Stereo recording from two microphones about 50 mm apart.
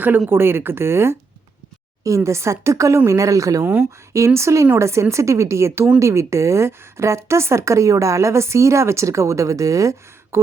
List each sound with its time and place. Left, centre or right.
0.3 s speech: right
2.0 s a woman's voice: right
4.4 s a woman's voice: right
10.3 s a sound: right